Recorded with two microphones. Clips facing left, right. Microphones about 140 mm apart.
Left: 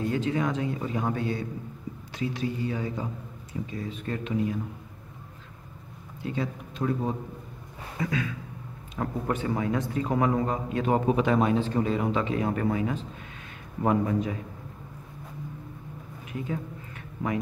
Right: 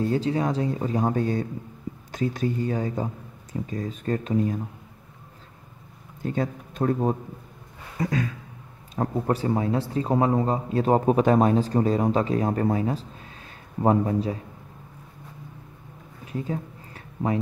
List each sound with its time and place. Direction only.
0.0 s speech: 35° right (ahead or behind)
6.2 s speech: 45° right (ahead or behind)
16.3 s a sound: 35° right (ahead or behind)